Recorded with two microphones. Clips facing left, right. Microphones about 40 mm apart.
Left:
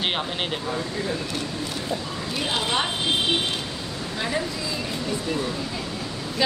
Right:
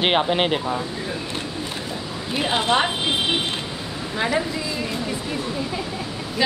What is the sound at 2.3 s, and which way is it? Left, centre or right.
Speech, right.